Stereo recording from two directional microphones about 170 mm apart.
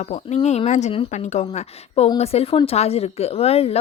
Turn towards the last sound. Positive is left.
turn(degrees=35)  # may be behind; listen again after turning